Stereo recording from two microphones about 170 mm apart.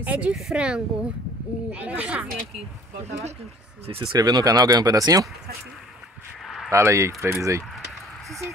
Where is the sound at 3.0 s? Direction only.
40° right (ahead or behind).